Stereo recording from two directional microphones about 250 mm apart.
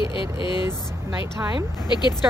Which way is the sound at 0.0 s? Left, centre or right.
Centre.